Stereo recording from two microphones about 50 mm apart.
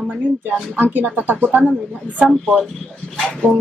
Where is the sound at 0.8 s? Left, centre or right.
Right.